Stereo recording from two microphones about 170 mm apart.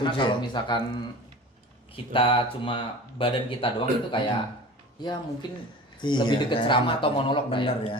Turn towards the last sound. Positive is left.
turn(degrees=30)  # may be behind; listen again after turning